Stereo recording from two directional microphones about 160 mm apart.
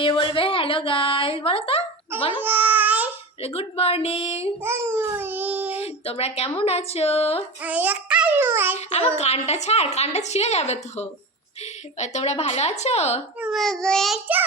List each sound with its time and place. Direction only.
0.0 s a sound: 30° left (ahead or behind)
2.1 s a child's voice: 35° left (ahead or behind)
2.4 s baby cry: 10° right (ahead or behind)
3.4 s speech: 40° left (ahead or behind)
4.6 s child singing: 15° right (ahead or behind)
5.8 s speech: 40° left (ahead or behind)
7.6 s a child's voice: 10° right (ahead or behind)
9.1 s a woman's voice: 40° left (ahead or behind)
13.4 s child singing: centre (ahead or behind)